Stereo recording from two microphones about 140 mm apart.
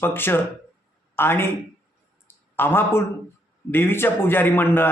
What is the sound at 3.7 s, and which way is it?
Speech, 15° left (ahead or behind).